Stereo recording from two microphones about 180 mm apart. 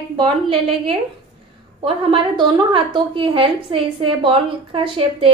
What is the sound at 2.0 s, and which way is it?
A woman's voice, 25° right (ahead or behind).